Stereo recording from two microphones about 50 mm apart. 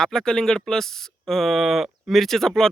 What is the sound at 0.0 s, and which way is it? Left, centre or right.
Speech, centre.